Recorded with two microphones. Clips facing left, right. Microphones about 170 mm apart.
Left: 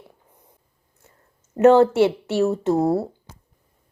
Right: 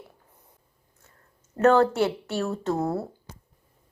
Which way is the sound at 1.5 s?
20° left (ahead or behind).